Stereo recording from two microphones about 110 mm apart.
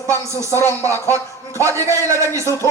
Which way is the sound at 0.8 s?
20° left (ahead or behind).